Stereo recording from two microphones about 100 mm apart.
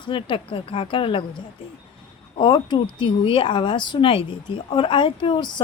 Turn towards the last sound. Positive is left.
turn(degrees=60)  # may be behind; listen again after turning